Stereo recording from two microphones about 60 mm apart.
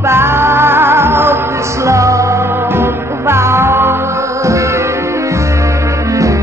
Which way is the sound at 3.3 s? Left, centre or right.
Right.